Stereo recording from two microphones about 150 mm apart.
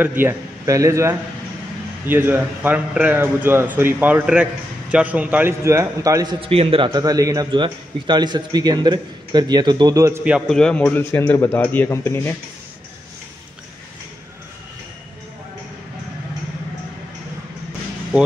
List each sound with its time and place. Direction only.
0.0 s speech: 15° right (ahead or behind)
6.4 s a man's voice: 40° right (ahead or behind); by 10.2 s 20° right (ahead or behind)
10.5 s a man's voice: 5° left (ahead or behind)